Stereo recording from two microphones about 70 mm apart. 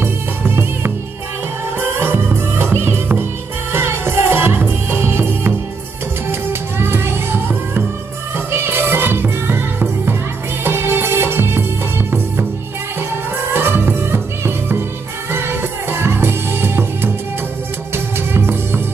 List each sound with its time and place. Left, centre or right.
0.0 s music: right
2.0 s music: right
6.8 s music: right
13.5 s music: right